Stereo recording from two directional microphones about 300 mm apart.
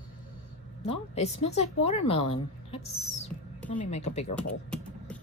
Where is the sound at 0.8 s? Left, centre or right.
Centre.